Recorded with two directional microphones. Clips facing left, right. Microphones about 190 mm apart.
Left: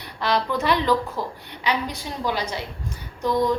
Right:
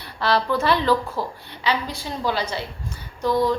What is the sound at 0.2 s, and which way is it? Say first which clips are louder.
A woman's voice: right 2 dB; 15° left (ahead or behind).